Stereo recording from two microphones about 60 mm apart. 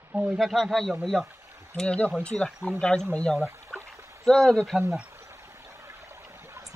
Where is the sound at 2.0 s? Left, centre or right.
Centre.